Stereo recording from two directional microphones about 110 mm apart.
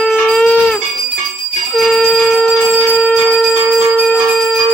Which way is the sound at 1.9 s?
5° left (ahead or behind).